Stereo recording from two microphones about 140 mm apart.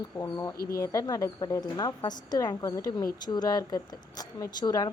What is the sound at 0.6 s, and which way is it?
Speech, 90° left.